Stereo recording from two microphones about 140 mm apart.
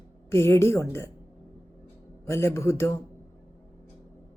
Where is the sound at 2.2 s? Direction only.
20° left (ahead or behind).